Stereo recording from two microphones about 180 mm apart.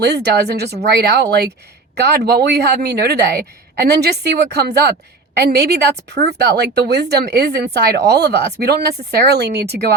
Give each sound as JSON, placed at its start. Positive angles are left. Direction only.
{"t": 0.0, "sound": "a woman's voice", "side_deg": -65}